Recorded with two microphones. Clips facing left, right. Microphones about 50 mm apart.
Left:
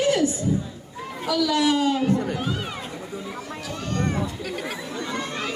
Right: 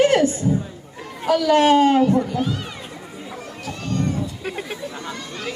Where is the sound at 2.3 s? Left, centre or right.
Centre.